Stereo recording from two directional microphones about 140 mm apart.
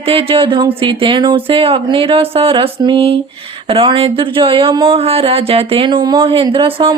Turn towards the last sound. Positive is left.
turn(degrees=-40)  # may be behind; listen again after turning